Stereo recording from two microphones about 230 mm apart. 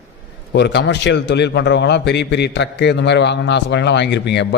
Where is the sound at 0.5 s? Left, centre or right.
Left.